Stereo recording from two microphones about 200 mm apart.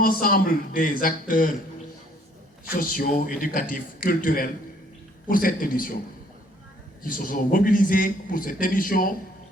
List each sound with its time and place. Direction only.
0.0 s a man's voice: 45° left (ahead or behind)
2.7 s a man's voice: 45° left (ahead or behind)
7.0 s a man's voice: 45° left (ahead or behind)